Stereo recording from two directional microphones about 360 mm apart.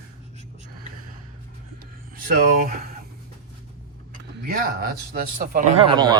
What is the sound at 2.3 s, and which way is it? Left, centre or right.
Speech, right.